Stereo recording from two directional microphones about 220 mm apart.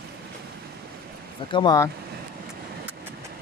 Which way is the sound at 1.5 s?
20° left (ahead or behind).